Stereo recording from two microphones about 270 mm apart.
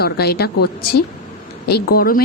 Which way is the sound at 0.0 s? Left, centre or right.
Left.